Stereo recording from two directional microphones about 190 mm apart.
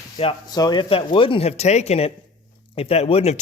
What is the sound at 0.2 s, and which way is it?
A man's voice, 25° left (ahead or behind).